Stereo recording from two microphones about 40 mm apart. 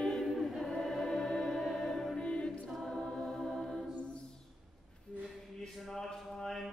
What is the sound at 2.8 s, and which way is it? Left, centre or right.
Music, centre.